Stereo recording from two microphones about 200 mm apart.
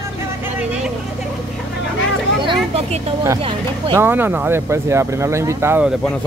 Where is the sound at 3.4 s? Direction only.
15° right (ahead or behind).